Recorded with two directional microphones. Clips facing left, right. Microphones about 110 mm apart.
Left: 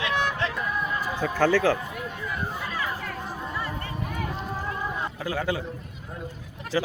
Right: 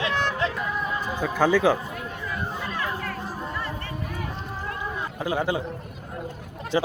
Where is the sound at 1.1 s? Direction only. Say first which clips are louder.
Right 1 dB; 10° right (ahead or behind).